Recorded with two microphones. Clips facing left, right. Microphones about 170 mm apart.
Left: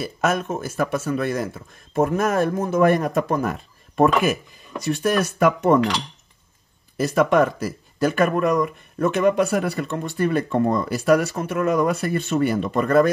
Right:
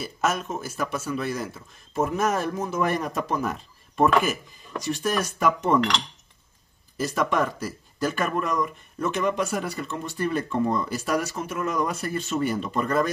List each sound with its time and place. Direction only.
0.0 s speech: 60° left (ahead or behind)
7.0 s speech: 65° left (ahead or behind)